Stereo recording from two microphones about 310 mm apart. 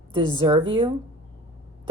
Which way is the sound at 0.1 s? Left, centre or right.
Centre.